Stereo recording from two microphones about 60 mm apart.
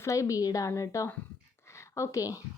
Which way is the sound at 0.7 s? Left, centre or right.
Left.